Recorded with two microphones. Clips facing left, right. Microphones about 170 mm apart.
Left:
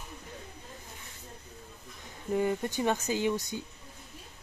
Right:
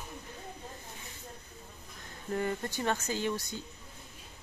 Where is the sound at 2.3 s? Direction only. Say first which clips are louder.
Left 4 dB; 15° left (ahead or behind).